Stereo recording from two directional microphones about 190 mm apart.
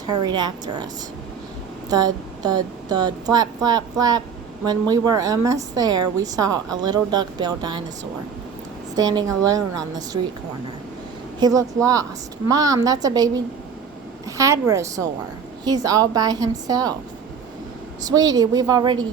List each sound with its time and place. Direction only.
0.1 s a woman's voice: 25° right (ahead or behind)
1.9 s a woman's voice: 20° right (ahead or behind)
9.0 s a woman's voice: 20° right (ahead or behind)
11.3 s a woman's voice: 20° right (ahead or behind)
18.0 s a woman's voice: 20° right (ahead or behind)